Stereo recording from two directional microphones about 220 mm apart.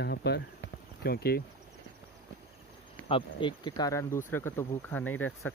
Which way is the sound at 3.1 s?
25° left (ahead or behind).